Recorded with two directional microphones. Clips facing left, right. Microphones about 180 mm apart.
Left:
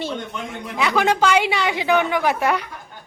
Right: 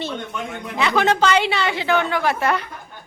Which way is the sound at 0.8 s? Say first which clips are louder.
Even; 10° left (ahead or behind).